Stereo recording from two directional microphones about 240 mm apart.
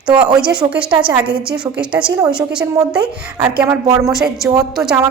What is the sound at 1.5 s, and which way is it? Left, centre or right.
Speech, centre.